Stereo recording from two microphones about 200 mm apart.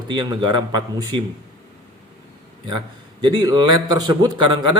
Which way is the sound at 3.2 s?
20° right (ahead or behind).